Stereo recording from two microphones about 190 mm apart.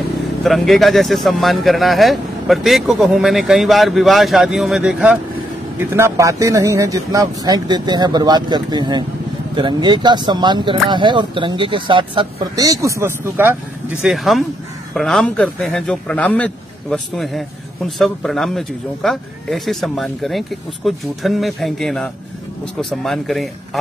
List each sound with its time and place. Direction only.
0.4 s a man's voice: centre (ahead or behind)
14.0 s a man's voice: centre (ahead or behind)